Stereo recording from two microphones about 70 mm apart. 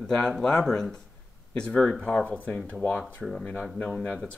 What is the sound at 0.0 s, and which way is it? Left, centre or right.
Speech, centre.